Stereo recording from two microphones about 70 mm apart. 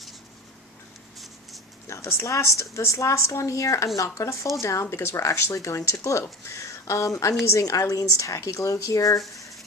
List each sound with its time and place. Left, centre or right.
1.9 s speech: left